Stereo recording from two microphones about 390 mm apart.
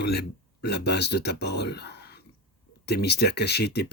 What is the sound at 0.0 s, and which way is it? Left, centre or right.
Speech, left.